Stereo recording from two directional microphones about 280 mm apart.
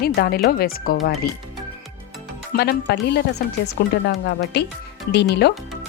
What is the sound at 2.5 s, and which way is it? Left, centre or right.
Speech, left.